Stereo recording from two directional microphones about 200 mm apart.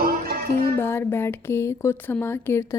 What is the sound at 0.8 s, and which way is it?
Speech, 10° left (ahead or behind).